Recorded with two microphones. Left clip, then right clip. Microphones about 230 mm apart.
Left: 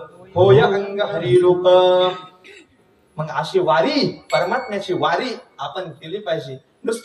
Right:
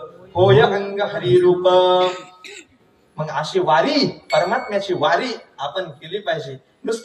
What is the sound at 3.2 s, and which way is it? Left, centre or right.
Speech, left.